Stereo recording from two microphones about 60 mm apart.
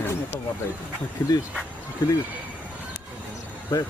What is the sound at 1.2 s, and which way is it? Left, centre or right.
Speech, left.